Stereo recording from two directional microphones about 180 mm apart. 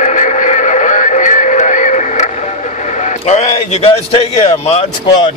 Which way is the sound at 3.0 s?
40° left (ahead or behind).